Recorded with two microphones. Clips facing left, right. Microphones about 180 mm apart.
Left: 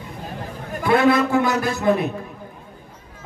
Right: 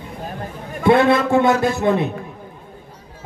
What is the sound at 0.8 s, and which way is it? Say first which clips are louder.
A man's voice: right 3 dB; 25° right (ahead or behind).